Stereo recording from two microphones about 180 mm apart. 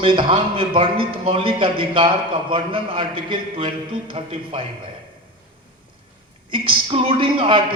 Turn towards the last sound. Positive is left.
turn(degrees=-30)  # may be behind; listen again after turning